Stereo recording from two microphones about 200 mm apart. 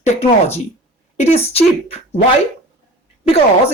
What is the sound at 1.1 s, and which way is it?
Speech, 30° left (ahead or behind).